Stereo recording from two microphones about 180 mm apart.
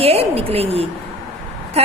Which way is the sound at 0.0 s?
35° right (ahead or behind).